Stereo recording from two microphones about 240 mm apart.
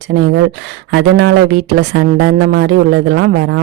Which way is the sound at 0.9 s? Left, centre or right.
Right.